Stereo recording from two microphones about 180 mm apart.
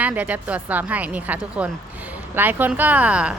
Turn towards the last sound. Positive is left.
turn(degrees=-5)  # may be behind; listen again after turning